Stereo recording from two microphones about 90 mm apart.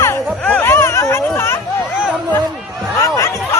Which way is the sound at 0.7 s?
30° left (ahead or behind).